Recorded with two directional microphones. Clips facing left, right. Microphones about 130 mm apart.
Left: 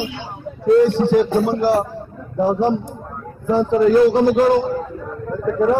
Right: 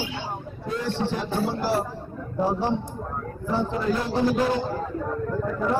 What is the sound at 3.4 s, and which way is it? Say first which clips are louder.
Speech: left 11 dB; 60° left (ahead or behind).